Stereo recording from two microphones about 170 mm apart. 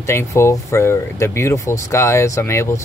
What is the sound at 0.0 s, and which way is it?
Speech, 15° left (ahead or behind).